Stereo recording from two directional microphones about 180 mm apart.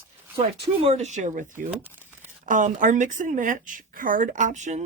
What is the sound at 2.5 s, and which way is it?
Speech, 45° right (ahead or behind).